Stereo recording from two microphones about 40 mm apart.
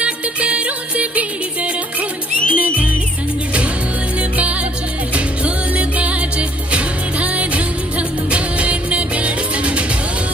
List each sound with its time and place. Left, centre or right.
0.0 s music: right
5.1 s music: right